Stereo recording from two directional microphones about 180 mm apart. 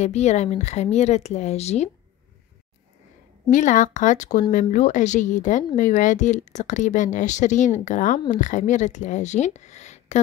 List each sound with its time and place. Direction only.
0.0 s speech: 40° left (ahead or behind)
3.4 s speech: 45° left (ahead or behind)